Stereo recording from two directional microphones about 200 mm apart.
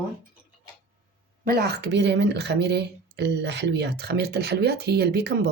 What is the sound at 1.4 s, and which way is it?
Speech, 50° right (ahead or behind).